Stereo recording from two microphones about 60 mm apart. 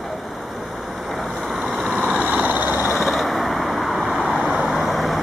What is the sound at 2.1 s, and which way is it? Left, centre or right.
Frog, centre.